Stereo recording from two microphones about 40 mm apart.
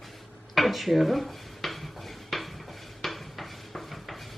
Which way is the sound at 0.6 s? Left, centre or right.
Centre.